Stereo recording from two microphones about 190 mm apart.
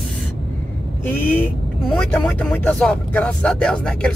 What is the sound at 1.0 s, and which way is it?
Speech, 10° left (ahead or behind).